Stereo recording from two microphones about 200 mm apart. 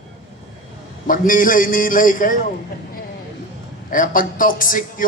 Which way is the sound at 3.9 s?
45° left (ahead or behind).